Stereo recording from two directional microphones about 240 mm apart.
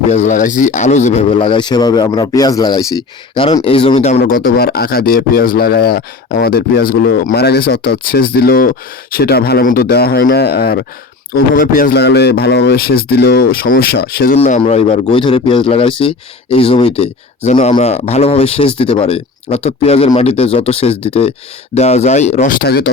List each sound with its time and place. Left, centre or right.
0.1 s a man's voice: left
4.2 s speech: left
14.3 s a man's voice: left
22.6 s speech: left